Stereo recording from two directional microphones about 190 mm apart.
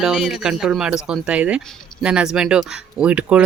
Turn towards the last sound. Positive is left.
turn(degrees=-5)  # may be behind; listen again after turning